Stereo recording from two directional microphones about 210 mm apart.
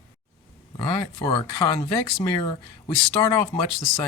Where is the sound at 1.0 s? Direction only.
25° left (ahead or behind).